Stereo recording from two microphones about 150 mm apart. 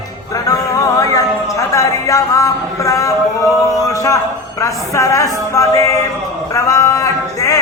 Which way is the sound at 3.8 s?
20° left (ahead or behind).